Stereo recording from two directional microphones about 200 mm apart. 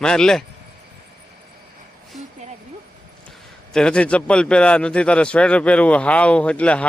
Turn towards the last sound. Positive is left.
turn(degrees=5)  # may be behind; listen again after turning